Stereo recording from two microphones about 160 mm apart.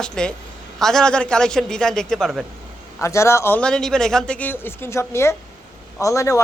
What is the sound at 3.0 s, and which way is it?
A man's voice, 15° left (ahead or behind).